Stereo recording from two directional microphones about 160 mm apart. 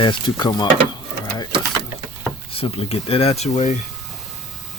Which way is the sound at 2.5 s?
35° left (ahead or behind).